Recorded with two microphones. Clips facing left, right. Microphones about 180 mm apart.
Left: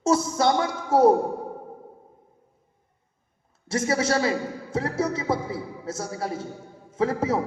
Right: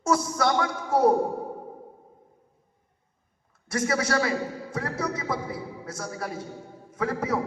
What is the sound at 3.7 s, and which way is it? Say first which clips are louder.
A man's voice: left 2 dB; 25° left (ahead or behind).